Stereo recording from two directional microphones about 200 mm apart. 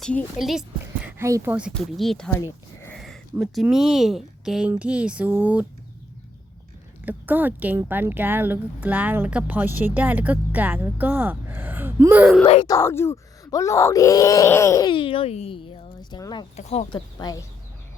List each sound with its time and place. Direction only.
0.0 s speech: 5° left (ahead or behind)
1.0 s speech: 10° right (ahead or behind)
1.7 s speech: 5° left (ahead or behind)
2.9 s a sound: centre (ahead or behind)
3.4 s speech: centre (ahead or behind)
7.0 s speech: 10° right (ahead or behind)
12.6 s speech: 15° left (ahead or behind)
16.6 s speech: 30° left (ahead or behind)